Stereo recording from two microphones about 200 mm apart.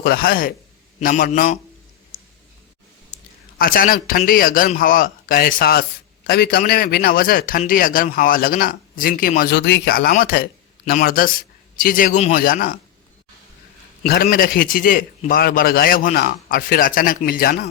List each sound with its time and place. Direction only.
0.0 s a man's voice: 50° left (ahead or behind)
3.6 s a man's voice: 45° left (ahead or behind)
14.1 s a man's voice: 50° left (ahead or behind)